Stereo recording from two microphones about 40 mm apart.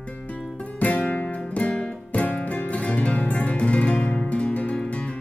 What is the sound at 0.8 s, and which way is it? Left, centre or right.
Music, left.